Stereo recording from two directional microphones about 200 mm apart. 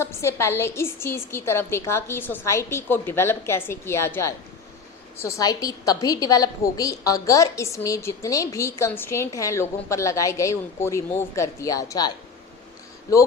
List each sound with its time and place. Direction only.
0.0 s a woman's voice: 10° left (ahead or behind)